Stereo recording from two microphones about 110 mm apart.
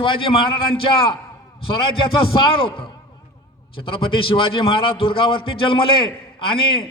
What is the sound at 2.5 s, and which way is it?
A man's voice, 50° left (ahead or behind).